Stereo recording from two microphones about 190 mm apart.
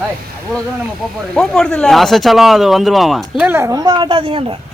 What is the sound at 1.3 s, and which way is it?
Speech, 5° left (ahead or behind).